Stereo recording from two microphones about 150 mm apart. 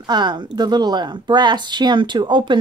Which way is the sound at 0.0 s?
30° right (ahead or behind).